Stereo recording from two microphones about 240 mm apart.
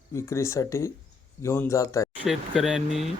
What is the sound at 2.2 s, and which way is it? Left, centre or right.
Speech, centre.